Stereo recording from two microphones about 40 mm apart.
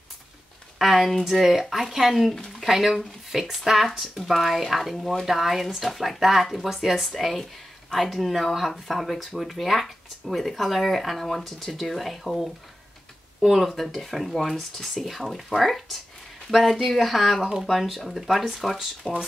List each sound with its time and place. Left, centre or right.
0.7 s speech: centre
2.3 s speech: centre
2.7 s speech: centre
13.5 s speech: centre
19.1 s speech: centre